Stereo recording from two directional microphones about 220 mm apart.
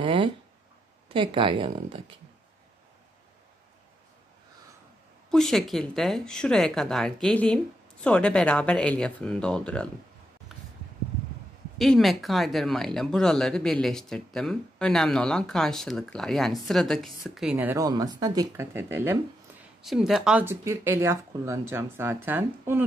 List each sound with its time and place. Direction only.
0.0 s a sound: 25° right (ahead or behind)
1.0 s speech: 25° right (ahead or behind)
5.3 s speech: centre (ahead or behind)
11.8 s speech: centre (ahead or behind)